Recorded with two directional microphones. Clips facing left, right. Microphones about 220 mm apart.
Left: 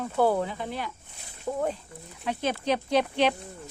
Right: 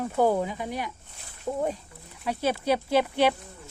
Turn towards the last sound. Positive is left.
turn(degrees=-10)  # may be behind; listen again after turning